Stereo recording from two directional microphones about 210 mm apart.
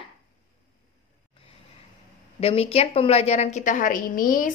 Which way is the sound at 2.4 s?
30° left (ahead or behind).